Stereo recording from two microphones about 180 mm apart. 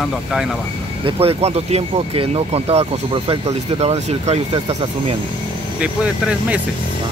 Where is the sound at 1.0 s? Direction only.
35° right (ahead or behind).